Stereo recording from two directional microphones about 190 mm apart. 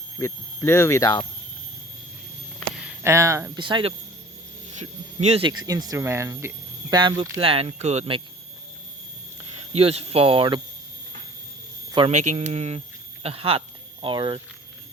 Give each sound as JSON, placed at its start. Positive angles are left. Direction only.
{"t": 0.2, "sound": "speech", "side_deg": 15}
{"t": 2.6, "sound": "a sound", "side_deg": 0}
{"t": 3.0, "sound": "speech", "side_deg": -15}
{"t": 5.6, "sound": "speech", "side_deg": -20}
{"t": 9.7, "sound": "speech", "side_deg": -35}
{"t": 11.9, "sound": "hum", "side_deg": -25}
{"t": 12.1, "sound": "speech", "side_deg": -40}